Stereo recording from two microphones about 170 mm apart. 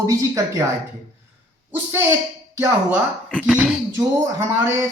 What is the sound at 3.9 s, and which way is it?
Speech, 15° right (ahead or behind).